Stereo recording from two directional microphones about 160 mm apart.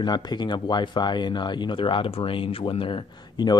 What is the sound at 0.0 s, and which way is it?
Speech, 25° left (ahead or behind).